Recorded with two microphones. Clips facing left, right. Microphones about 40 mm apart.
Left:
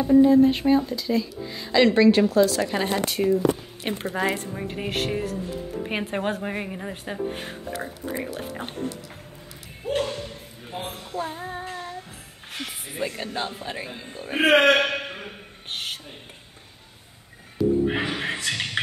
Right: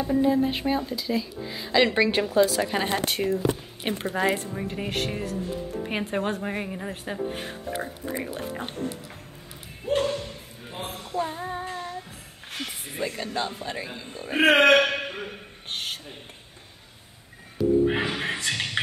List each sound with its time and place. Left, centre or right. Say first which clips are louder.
0.0 s speech: left 7 dB; centre
3.1 s speech: left 3 dB; right
3.8 s a woman's voice: even; centre
9.8 s speech: right 1 dB; centre
10.7 s child singing: even; centre
12.5 s speech: even; centre
13.0 s speech: even; centre
14.2 s a woman's voice: left 1 dB; centre
14.6 s a sound: right 1 dB; centre
17.6 s a woman's voice: left 1 dB; centre
18.0 s a woman's voice: even; centre